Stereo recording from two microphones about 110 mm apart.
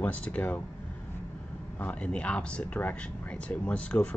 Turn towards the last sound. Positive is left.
turn(degrees=10)  # may be behind; listen again after turning